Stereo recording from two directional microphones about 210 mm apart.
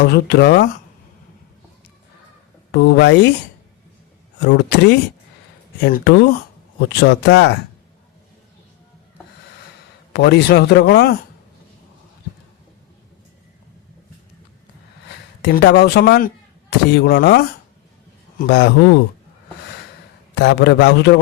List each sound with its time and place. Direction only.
0.0 s speech: 50° left (ahead or behind)
2.7 s a man's voice: 55° left (ahead or behind)
4.4 s a man's voice: 55° left (ahead or behind)
10.1 s speech: 55° left (ahead or behind)
15.4 s speech: 50° left (ahead or behind)
20.3 s a man's voice: 55° left (ahead or behind)